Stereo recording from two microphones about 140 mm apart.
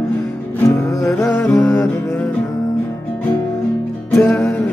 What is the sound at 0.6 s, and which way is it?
Music, 20° left (ahead or behind).